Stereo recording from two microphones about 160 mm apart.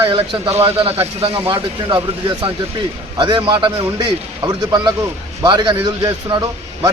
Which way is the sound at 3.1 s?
30° right (ahead or behind).